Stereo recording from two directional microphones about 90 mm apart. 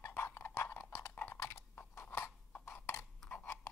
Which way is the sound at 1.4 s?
35° left (ahead or behind).